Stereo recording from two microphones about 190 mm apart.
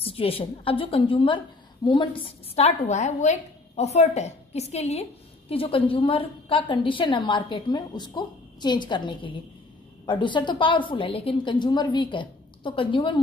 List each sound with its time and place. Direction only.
0.0 s a woman's voice: 30° left (ahead or behind)